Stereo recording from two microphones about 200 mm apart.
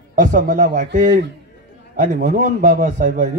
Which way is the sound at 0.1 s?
40° right (ahead or behind).